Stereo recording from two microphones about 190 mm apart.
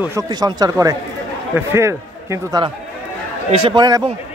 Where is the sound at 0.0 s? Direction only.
15° right (ahead or behind).